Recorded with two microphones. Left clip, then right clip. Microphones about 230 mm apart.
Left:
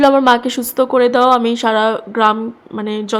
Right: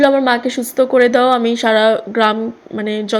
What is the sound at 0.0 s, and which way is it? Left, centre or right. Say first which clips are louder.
A woman's voice: left 2 dB; centre.